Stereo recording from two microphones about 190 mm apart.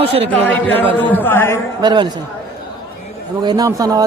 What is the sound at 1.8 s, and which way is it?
Speech, 25° right (ahead or behind).